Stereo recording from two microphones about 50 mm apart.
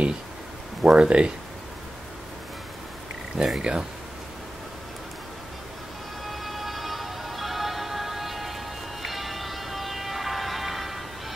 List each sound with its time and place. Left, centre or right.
0.8 s speech: right
3.3 s speech: centre
6.2 s music: centre